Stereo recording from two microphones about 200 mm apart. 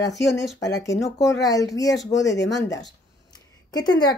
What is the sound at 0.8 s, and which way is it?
Speech, 15° left (ahead or behind).